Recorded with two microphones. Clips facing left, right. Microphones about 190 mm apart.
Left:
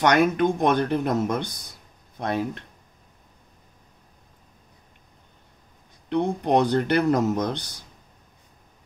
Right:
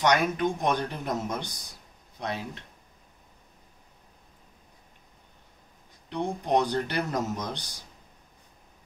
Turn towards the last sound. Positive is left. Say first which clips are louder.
# left 8 dB
turn(degrees=60)  # may be behind; listen again after turning